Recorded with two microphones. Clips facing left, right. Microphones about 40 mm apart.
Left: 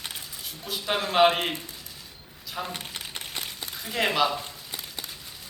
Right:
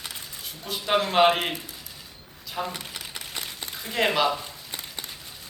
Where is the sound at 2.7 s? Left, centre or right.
Left.